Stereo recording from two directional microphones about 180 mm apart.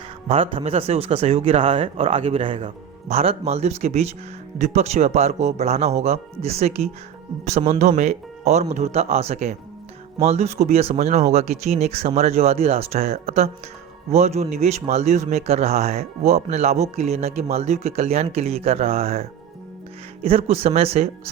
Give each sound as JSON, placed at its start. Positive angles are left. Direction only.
{"t": 0.3, "sound": "a man's voice", "side_deg": -35}